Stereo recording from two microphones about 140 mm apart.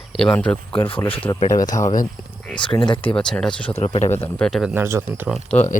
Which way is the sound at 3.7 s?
45° left (ahead or behind).